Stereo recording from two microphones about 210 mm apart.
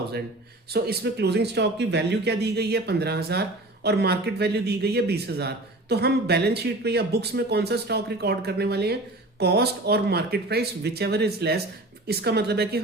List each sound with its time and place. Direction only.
0.7 s a man's voice: 50° right (ahead or behind)